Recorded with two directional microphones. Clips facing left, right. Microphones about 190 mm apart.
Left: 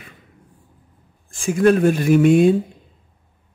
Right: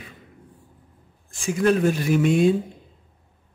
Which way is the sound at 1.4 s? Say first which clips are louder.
Left 5 dB; 50° left (ahead or behind).